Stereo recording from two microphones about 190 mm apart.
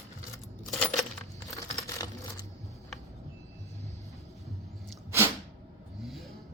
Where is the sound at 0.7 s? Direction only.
Centre (ahead or behind).